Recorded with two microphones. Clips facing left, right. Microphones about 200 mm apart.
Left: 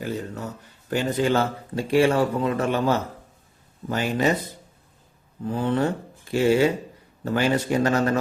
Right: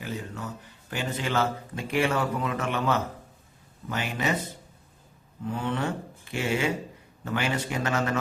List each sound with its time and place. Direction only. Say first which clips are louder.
0.0 s speech: left 5 dB; 40° left (ahead or behind)
1.1 s a man's voice: left 4 dB; 30° left (ahead or behind)
5.5 s a man's voice: left 6 dB; 35° left (ahead or behind)